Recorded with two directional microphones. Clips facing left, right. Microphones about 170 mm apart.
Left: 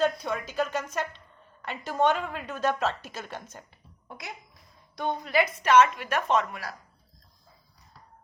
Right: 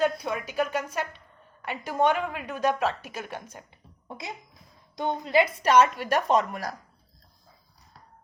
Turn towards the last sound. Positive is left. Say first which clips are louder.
# right 2 dB
turn(degrees=-40)  # may be behind; listen again after turning